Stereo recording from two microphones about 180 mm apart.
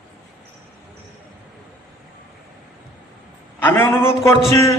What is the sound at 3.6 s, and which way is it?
Speech, 10° left (ahead or behind).